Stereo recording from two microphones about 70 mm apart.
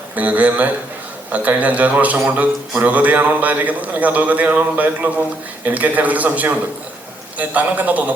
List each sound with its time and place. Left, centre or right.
0.2 s a man's voice: right